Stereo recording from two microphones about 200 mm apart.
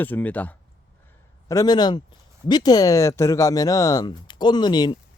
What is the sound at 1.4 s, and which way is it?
A man's voice, 20° left (ahead or behind).